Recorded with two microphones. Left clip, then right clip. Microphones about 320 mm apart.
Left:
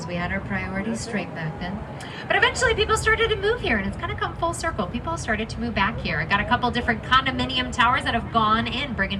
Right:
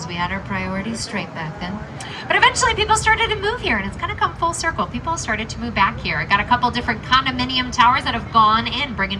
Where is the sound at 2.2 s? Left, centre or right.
Right.